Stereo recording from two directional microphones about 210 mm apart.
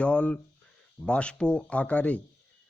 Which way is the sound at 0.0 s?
5° left (ahead or behind).